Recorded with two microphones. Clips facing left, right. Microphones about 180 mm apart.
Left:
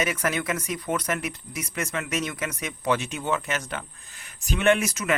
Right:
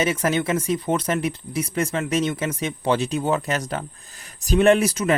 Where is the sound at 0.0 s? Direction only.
30° right (ahead or behind).